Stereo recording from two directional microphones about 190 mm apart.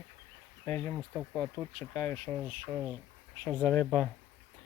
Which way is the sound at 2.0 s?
20° left (ahead or behind).